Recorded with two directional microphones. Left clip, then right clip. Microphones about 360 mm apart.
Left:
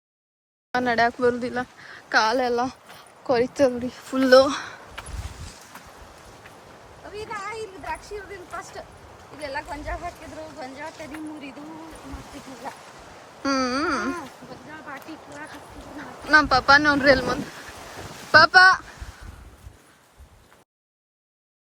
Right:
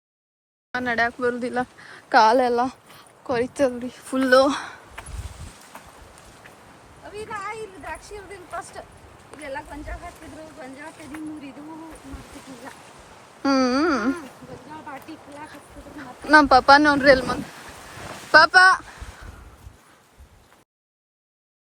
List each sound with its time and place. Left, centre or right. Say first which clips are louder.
0.7 s speech: left 2 dB; centre
7.3 s speech: right 1 dB; centre
9.4 s speech: left 2 dB; centre
13.4 s speech: right 3 dB; centre
15.1 s speech: left 1 dB; centre